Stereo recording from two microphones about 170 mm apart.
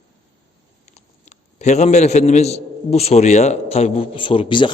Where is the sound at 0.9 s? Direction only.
40° left (ahead or behind).